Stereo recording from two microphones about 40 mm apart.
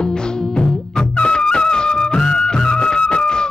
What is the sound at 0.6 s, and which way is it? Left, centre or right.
Music, left.